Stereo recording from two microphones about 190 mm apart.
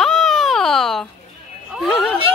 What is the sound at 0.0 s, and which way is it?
Baby cry, centre (ahead or behind).